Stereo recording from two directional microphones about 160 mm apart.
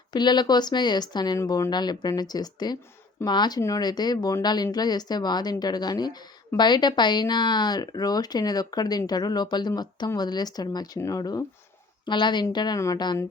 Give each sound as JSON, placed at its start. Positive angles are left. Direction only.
{"t": 0.1, "sound": "speech", "side_deg": 25}